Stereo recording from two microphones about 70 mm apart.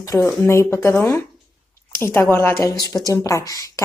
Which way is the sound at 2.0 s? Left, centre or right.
Left.